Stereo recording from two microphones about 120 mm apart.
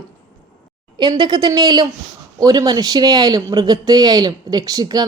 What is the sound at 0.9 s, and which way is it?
A woman's voice, 40° right (ahead or behind).